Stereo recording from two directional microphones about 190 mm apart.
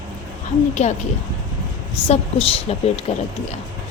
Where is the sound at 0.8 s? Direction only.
35° left (ahead or behind).